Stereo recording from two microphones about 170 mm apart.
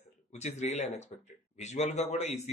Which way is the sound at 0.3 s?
40° left (ahead or behind).